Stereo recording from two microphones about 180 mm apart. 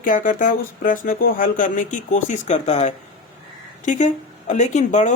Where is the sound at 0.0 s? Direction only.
50° left (ahead or behind).